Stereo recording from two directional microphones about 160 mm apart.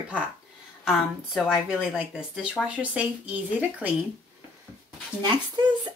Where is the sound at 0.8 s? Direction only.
5° right (ahead or behind).